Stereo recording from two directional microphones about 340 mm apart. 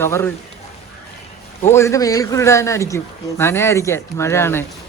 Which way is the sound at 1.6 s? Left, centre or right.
Centre.